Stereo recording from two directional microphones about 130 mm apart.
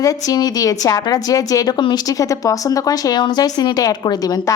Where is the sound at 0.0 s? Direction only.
30° left (ahead or behind).